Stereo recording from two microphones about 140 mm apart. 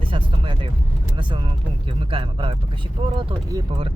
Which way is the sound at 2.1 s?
40° right (ahead or behind).